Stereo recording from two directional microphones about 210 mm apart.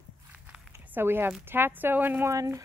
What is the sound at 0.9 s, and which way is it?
Speech, 10° right (ahead or behind).